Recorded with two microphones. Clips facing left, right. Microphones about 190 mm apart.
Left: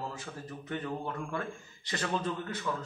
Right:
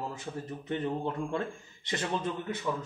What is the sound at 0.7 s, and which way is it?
A man's voice, 25° right (ahead or behind).